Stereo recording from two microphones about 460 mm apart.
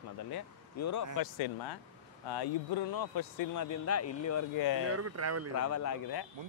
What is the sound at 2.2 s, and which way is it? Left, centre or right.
Speech, left.